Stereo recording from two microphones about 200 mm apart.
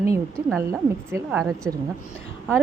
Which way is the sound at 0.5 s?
10° right (ahead or behind).